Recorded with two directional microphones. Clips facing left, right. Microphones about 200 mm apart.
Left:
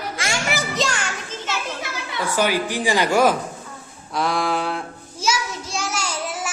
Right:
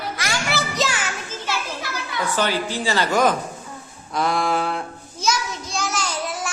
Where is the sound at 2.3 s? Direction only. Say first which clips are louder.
Left 3 dB; 10° left (ahead or behind).